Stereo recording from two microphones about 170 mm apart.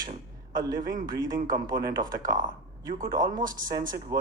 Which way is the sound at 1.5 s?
25° right (ahead or behind).